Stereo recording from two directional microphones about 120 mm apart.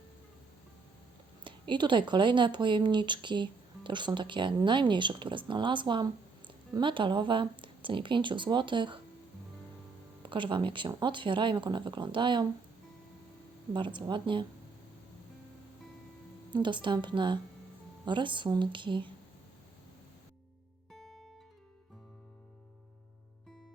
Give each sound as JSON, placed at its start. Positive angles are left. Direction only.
{"t": 1.5, "sound": "speech", "side_deg": -40}
{"t": 10.2, "sound": "speech", "side_deg": -45}
{"t": 13.7, "sound": "speech", "side_deg": -40}
{"t": 16.5, "sound": "speech", "side_deg": -40}